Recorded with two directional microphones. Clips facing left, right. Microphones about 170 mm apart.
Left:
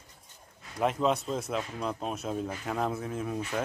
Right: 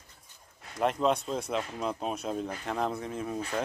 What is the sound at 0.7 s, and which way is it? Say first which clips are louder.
Speech: even; centre (ahead or behind).